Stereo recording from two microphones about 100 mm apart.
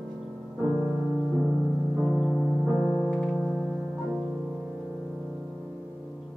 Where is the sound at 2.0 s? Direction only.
Centre (ahead or behind); by 4.4 s 15° right (ahead or behind).